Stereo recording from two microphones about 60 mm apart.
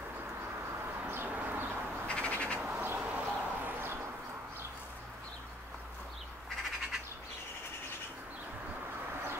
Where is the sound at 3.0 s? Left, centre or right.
Right.